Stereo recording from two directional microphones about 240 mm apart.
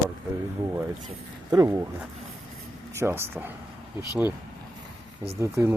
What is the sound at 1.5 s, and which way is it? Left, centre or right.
Speech, centre.